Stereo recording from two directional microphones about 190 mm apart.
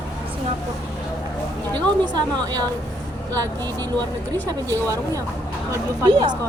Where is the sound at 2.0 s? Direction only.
20° right (ahead or behind).